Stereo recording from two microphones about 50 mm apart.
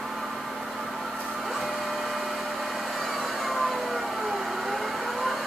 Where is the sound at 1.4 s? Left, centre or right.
Centre.